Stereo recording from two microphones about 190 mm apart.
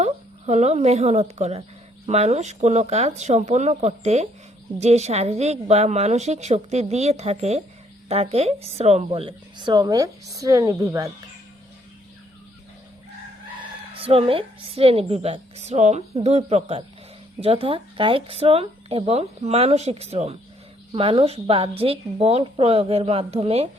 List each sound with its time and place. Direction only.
0.0 s a woman's voice: 35° right (ahead or behind); by 11.1 s 15° right (ahead or behind)
13.6 s speech: 30° right (ahead or behind)